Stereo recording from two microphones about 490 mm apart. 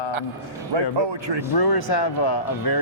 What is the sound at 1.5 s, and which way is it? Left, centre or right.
Speech, left.